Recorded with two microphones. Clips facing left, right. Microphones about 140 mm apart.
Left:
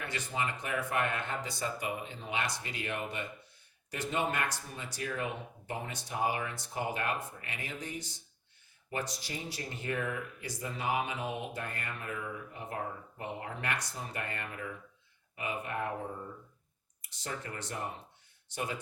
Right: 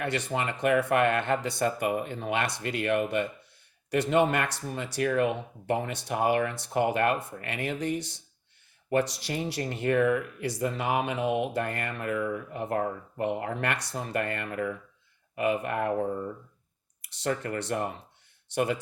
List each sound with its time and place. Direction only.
0.0 s speech: 70° right (ahead or behind)
17.0 s speech: 70° right (ahead or behind)